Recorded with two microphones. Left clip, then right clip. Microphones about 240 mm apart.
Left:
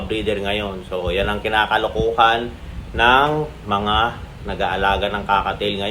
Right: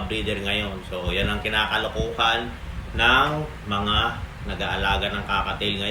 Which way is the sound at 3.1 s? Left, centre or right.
Centre.